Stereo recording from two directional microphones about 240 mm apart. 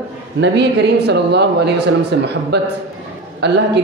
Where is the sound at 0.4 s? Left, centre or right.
Right.